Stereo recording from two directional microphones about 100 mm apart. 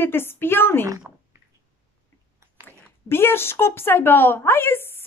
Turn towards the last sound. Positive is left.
turn(degrees=25)  # may be behind; listen again after turning